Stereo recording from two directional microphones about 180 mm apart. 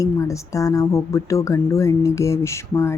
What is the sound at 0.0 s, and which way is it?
Speech, 15° left (ahead or behind).